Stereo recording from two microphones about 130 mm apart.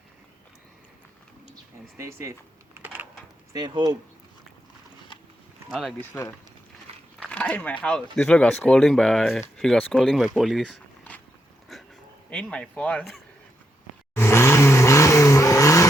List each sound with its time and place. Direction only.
2.0 s speech: 20° right (ahead or behind)
2.8 s a sound: 15° right (ahead or behind)
3.5 s speech: 30° right (ahead or behind)
7.3 s speech: 10° left (ahead or behind)
11.1 s dog: 10° left (ahead or behind)
11.7 s dog: centre (ahead or behind)
12.3 s speech: 10° left (ahead or behind)
14.2 s vehicle: 20° left (ahead or behind)